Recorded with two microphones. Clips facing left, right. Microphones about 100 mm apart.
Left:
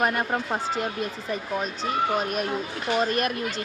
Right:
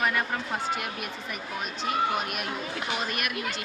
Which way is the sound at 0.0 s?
45° left (ahead or behind).